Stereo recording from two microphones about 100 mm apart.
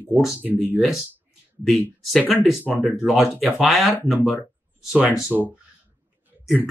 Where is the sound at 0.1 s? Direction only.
15° right (ahead or behind).